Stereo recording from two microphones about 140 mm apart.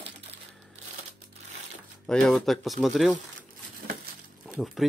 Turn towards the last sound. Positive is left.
turn(degrees=0)  # may be behind; listen again after turning